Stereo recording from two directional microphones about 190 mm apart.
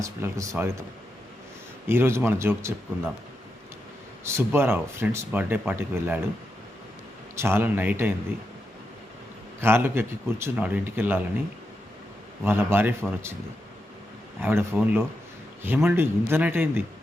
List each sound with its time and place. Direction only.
0.0 s speech: 15° right (ahead or behind)
1.9 s speech: 15° right (ahead or behind)
4.2 s speech: 15° right (ahead or behind)
7.3 s speech: 10° right (ahead or behind)
9.6 s speech: 10° right (ahead or behind)
12.5 s speech: 10° right (ahead or behind)
14.4 s speech: 10° right (ahead or behind)